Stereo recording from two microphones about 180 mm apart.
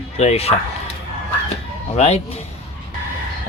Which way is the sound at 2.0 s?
35° left (ahead or behind).